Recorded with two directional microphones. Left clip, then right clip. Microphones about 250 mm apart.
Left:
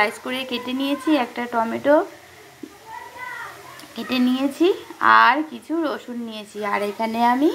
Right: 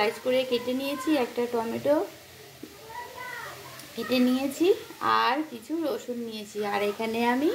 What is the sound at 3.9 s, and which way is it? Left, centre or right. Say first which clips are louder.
Speech: left 3 dB; centre.